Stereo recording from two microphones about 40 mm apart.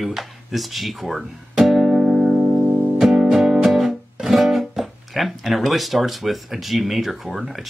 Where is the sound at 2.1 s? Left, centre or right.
Centre.